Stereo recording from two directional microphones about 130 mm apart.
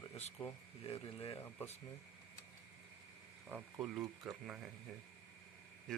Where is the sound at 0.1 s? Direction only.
55° left (ahead or behind).